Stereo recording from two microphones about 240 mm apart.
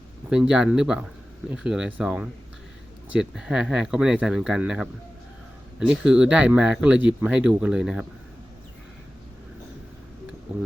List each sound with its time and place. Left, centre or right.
0.3 s speech: centre